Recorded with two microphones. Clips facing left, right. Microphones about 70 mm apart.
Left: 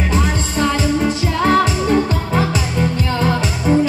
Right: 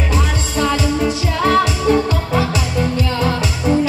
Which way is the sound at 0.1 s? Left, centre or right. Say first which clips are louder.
Left 1 dB; left.